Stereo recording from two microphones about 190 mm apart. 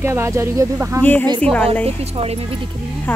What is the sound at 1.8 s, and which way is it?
Speech, 30° right (ahead or behind).